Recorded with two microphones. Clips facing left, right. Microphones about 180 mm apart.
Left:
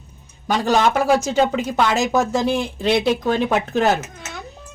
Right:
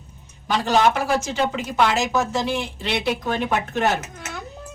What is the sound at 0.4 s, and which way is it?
Speech, 45° left (ahead or behind).